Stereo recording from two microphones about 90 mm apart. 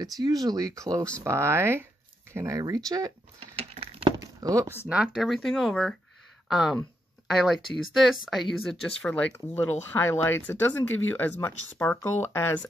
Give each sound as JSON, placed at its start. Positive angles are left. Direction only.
{"t": 0.2, "sound": "speech", "side_deg": -45}
{"t": 1.2, "sound": "speech", "side_deg": -30}
{"t": 3.8, "sound": "a sound", "side_deg": -90}
{"t": 4.2, "sound": "a sound", "side_deg": -40}
{"t": 4.8, "sound": "speech", "side_deg": -10}
{"t": 5.1, "sound": "speech", "side_deg": 0}
{"t": 9.0, "sound": "speech", "side_deg": 15}